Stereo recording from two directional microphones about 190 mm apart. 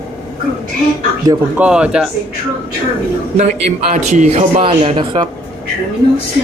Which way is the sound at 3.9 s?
40° right (ahead or behind).